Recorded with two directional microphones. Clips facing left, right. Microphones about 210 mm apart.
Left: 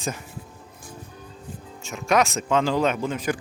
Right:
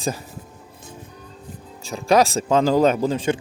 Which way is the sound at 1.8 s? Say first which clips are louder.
Right 4 dB; 35° right (ahead or behind).